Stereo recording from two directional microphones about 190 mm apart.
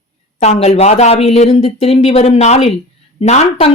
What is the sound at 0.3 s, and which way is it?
Speech, 35° left (ahead or behind).